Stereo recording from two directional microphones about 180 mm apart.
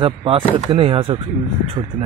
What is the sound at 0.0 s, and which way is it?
Speech, 30° right (ahead or behind).